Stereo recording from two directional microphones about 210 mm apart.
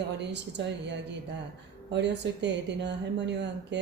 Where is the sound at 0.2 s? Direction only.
55° right (ahead or behind).